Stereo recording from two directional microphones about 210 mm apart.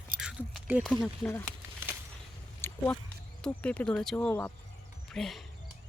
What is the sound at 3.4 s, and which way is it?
Speech, 5° left (ahead or behind).